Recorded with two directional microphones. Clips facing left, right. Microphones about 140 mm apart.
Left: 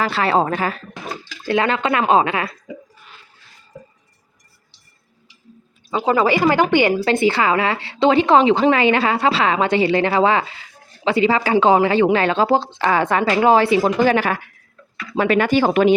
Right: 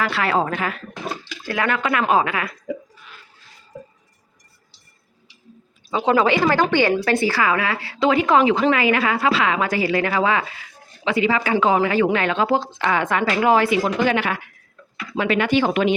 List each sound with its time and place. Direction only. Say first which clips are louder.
0.0 s a woman's voice: left 3 dB; 30° left (ahead or behind)
5.9 s a woman's voice: left 1 dB; 5° left (ahead or behind); by 15.9 s 40° left (ahead or behind)